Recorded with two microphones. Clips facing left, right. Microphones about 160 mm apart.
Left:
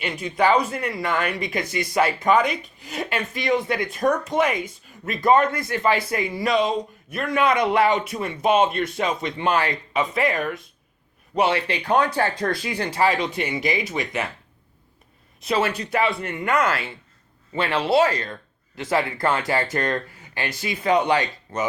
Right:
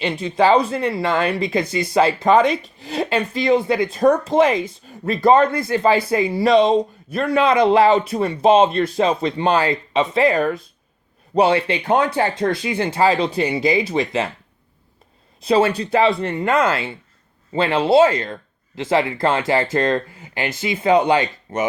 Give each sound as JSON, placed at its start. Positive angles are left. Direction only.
{"t": 0.0, "sound": "speech", "side_deg": -30}
{"t": 15.4, "sound": "speech", "side_deg": -30}